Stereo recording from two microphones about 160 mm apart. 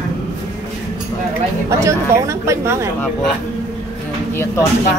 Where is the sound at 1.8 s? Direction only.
20° right (ahead or behind).